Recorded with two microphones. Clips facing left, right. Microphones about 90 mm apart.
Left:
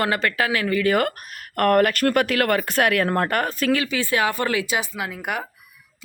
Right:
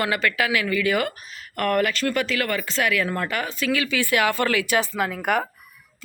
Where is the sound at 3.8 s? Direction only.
20° left (ahead or behind).